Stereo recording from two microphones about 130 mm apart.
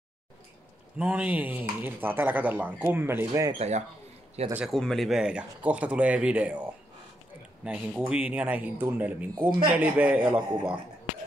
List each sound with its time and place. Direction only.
0.9 s speech: 10° right (ahead or behind)
3.5 s speech: 55° right (ahead or behind)
4.6 s speech: 5° left (ahead or behind)